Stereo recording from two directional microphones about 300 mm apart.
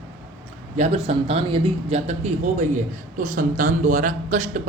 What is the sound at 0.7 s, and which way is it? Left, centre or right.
Speech, right.